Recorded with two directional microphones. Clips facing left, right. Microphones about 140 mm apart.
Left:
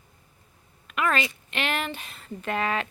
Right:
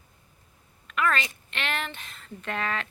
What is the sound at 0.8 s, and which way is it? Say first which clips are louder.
Speech: left 1 dB; 15° left (ahead or behind).